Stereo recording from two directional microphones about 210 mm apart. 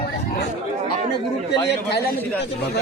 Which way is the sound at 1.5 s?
55° left (ahead or behind).